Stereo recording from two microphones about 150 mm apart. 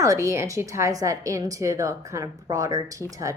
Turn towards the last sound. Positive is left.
turn(degrees=-20)  # may be behind; listen again after turning